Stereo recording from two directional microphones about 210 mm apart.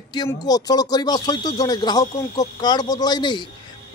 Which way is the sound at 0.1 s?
20° left (ahead or behind).